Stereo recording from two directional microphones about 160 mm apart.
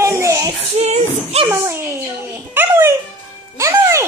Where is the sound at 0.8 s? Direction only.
40° right (ahead or behind).